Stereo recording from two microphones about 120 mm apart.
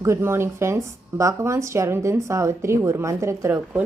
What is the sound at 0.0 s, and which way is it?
Speech, 20° right (ahead or behind).